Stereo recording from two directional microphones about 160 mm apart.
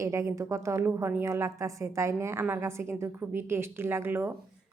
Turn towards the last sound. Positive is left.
turn(degrees=-15)  # may be behind; listen again after turning